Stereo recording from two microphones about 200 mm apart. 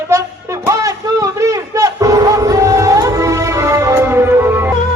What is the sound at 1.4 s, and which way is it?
Music, 15° right (ahead or behind).